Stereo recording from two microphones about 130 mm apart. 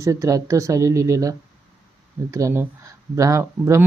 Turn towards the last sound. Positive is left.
turn(degrees=-25)  # may be behind; listen again after turning